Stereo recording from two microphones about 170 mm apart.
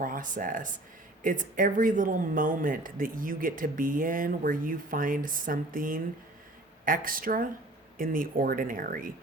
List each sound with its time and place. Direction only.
0.0 s speech: 50° right (ahead or behind)